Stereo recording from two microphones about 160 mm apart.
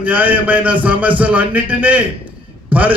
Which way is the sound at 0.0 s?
10° right (ahead or behind).